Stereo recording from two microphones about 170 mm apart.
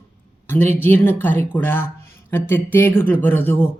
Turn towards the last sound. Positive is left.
turn(degrees=10)  # may be behind; listen again after turning